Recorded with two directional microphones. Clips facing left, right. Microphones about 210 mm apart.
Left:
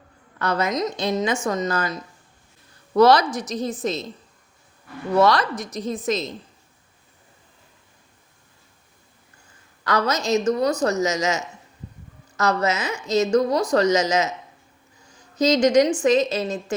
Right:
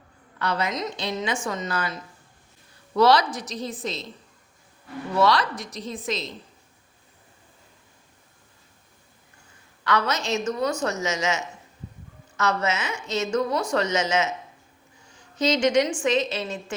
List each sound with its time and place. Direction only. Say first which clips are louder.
0.3 s a woman's voice: left 4 dB; 45° left (ahead or behind)
5.1 s a woman's voice: left 3 dB; 45° left (ahead or behind)
9.8 s a woman's voice: left 3 dB; 40° left (ahead or behind)
15.4 s a woman's voice: left 4 dB; 40° left (ahead or behind)